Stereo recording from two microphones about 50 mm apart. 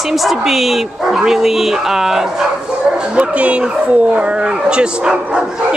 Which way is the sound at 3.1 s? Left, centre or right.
Right.